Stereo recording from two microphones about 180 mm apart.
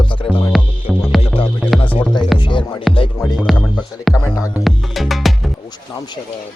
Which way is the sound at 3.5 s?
Centre (ahead or behind).